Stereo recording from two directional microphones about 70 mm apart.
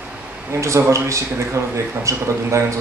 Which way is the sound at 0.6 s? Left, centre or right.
Right.